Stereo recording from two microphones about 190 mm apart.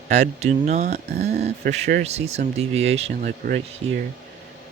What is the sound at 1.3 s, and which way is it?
Speech, 55° right (ahead or behind).